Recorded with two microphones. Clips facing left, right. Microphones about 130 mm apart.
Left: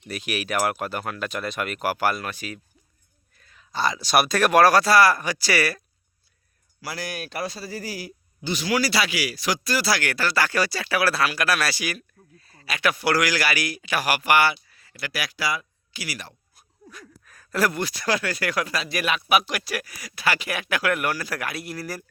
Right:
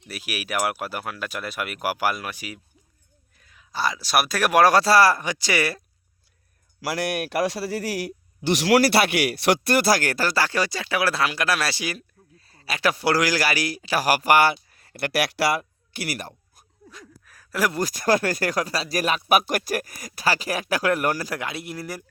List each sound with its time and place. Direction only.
0.1 s speech: 5° right (ahead or behind)
4.7 s speech: 30° right (ahead or behind)
5.2 s speech: 20° right (ahead or behind)
6.8 s speech: 70° right (ahead or behind); by 16.3 s 50° right (ahead or behind)
17.2 s gasp: 5° right (ahead or behind)
17.7 s speech: 45° right (ahead or behind)
21.2 s speech: 20° right (ahead or behind)